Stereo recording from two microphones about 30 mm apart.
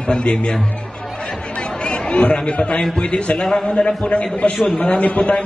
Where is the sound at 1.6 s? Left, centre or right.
Left.